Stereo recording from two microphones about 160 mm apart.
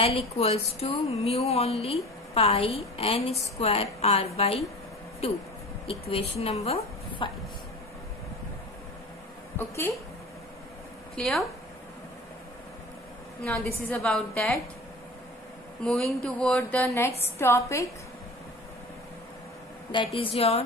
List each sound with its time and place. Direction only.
0.4 s a woman's voice: 40° left (ahead or behind)
9.6 s a woman's voice: 15° left (ahead or behind)
11.1 s a woman's voice: centre (ahead or behind)
13.4 s a woman's voice: 5° left (ahead or behind)
15.8 s a woman's voice: 5° left (ahead or behind)
20.2 s speech: 35° left (ahead or behind)